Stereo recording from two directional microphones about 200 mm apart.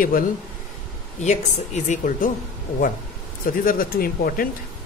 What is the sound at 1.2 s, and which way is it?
A woman's voice, 35° left (ahead or behind).